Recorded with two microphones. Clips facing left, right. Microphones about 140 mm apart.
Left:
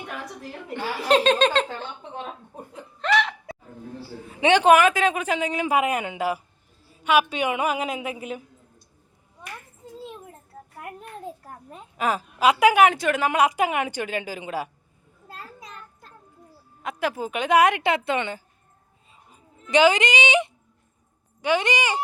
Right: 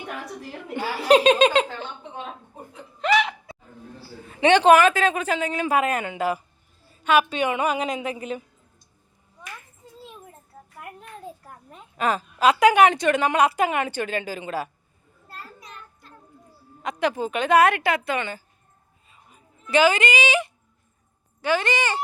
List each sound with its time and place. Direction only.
0.7 s speech: 10° right (ahead or behind)
3.0 s hiccup: 5° right (ahead or behind)
4.3 s a woman's voice: 10° left (ahead or behind)
11.9 s a woman's voice: 10° left (ahead or behind)
16.8 s a woman's voice: 5° left (ahead or behind)